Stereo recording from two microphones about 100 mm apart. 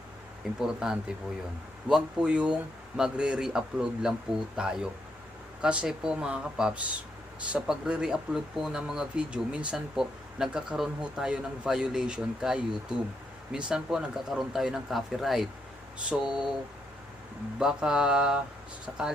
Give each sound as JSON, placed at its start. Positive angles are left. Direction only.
{"t": 0.6, "sound": "speech", "side_deg": -5}
{"t": 17.6, "sound": "speech", "side_deg": -5}